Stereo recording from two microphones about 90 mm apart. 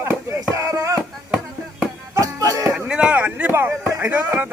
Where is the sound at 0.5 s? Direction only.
35° right (ahead or behind).